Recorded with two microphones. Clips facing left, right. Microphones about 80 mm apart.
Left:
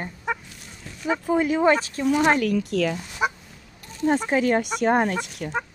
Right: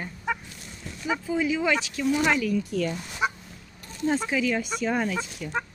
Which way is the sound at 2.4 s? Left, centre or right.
Left.